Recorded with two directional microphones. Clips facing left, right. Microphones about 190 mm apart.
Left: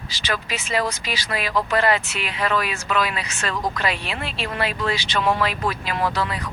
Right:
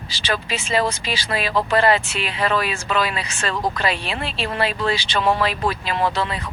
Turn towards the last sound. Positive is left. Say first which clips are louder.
# right 2 dB
turn(degrees=-25)  # may be behind; listen again after turning